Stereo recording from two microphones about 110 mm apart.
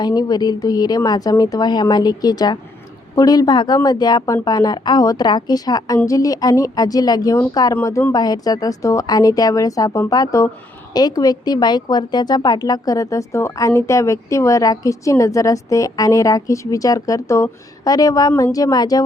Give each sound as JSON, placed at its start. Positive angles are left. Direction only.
{"t": 0.0, "sound": "speech", "side_deg": 40}